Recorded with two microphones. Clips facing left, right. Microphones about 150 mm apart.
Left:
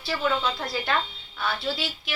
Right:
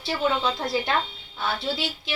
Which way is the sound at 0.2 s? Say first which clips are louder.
Right 2 dB; 25° right (ahead or behind).